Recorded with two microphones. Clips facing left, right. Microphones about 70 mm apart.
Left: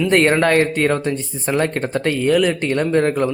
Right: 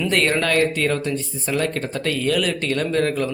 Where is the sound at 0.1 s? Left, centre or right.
Left.